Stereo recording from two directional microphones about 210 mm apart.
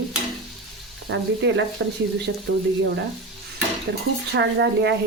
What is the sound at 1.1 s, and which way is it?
Stir, 60° right (ahead or behind).